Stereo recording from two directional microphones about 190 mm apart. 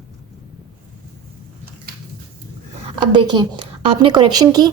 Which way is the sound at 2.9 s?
25° right (ahead or behind).